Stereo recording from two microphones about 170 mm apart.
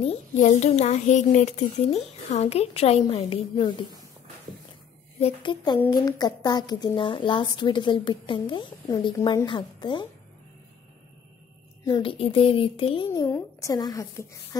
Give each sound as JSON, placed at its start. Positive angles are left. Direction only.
{"t": 0.4, "sound": "a child's voice", "side_deg": 45}
{"t": 5.2, "sound": "a woman's voice", "side_deg": 30}
{"t": 11.8, "sound": "a child's voice", "side_deg": 30}